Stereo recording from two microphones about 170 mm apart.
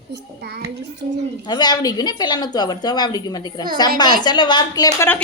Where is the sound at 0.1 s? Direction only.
70° right (ahead or behind).